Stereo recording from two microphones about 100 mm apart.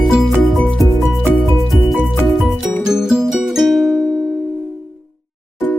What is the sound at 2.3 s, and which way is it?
Music, centre (ahead or behind).